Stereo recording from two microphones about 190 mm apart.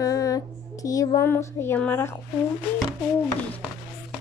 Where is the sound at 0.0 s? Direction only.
20° left (ahead or behind).